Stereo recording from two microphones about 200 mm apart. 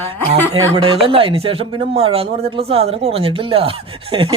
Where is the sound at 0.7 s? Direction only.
30° right (ahead or behind).